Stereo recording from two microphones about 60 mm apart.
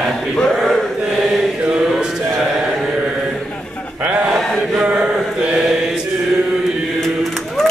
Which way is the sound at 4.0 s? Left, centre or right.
Right.